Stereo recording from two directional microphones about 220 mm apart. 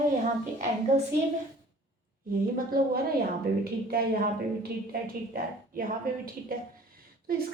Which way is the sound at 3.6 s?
45° right (ahead or behind).